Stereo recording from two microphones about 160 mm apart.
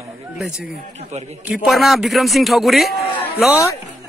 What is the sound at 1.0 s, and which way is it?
Speech, 45° right (ahead or behind).